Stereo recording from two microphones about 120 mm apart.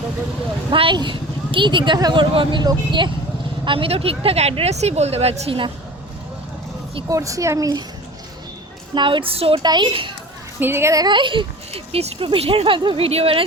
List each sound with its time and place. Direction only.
0.7 s speech: 45° right (ahead or behind)
7.1 s a child's voice: 25° right (ahead or behind)
9.0 s speech: 45° right (ahead or behind)
9.6 s speech: 40° right (ahead or behind)
10.6 s a child's voice: 20° right (ahead or behind)
11.0 s speech: 40° right (ahead or behind)